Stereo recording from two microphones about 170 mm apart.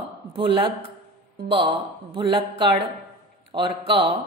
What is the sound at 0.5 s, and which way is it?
A woman's voice, 30° right (ahead or behind).